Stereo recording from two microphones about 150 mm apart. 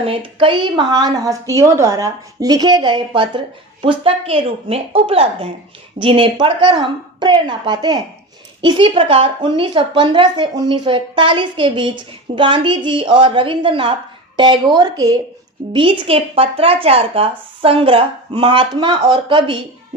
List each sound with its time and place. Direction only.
0.0 s a woman's voice: 40° right (ahead or behind)